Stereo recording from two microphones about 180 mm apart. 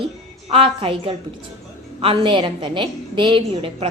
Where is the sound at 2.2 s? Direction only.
30° right (ahead or behind).